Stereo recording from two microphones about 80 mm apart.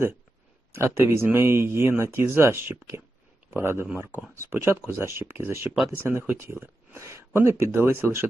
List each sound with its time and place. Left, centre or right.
0.7 s speech: right